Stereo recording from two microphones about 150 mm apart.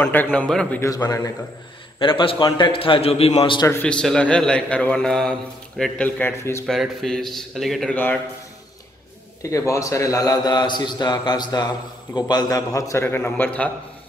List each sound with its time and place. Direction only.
0.0 s a man's voice: 10° left (ahead or behind)
0.7 s a man's voice: 25° left (ahead or behind)
2.0 s a man's voice: 35° left (ahead or behind)
3.6 s a man's voice: 10° left (ahead or behind)
6.6 s a man's voice: centre (ahead or behind)
9.4 s a man's voice: 20° left (ahead or behind)